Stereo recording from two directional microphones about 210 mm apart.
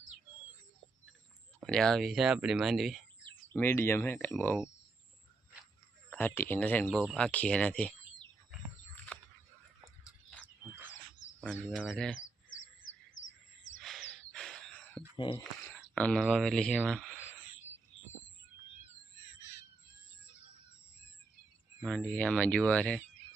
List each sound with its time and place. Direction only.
1.6 s speech: 5° left (ahead or behind)
6.1 s speech: 10° left (ahead or behind)
10.0 s a sound: centre (ahead or behind)
11.3 s speech: 5° left (ahead or behind)
12.8 s bird: 65° left (ahead or behind)
13.8 s a sound: centre (ahead or behind)
15.1 s a sound: 25° left (ahead or behind)
16.0 s speech: 5° left (ahead or behind)
21.8 s speech: 5° left (ahead or behind)